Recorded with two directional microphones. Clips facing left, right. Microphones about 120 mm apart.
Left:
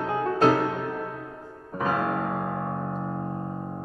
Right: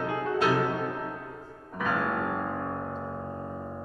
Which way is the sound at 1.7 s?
35° left (ahead or behind).